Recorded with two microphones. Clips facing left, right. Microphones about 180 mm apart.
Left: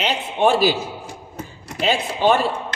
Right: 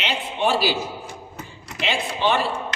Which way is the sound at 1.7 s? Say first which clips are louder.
Left 4 dB; 40° left (ahead or behind).